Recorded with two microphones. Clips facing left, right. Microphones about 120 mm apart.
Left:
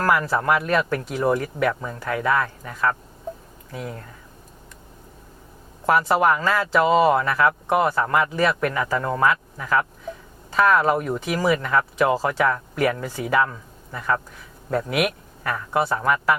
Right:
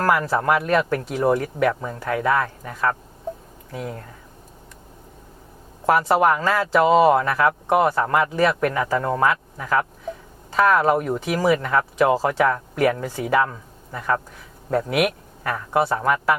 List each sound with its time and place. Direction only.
0.0 s speech: 40° right (ahead or behind)
5.9 s speech: 45° right (ahead or behind)
14.9 s speech: 50° right (ahead or behind)
15.5 s speech: 40° right (ahead or behind)